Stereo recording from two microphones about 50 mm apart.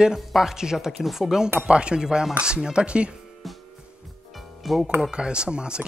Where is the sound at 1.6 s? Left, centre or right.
Right.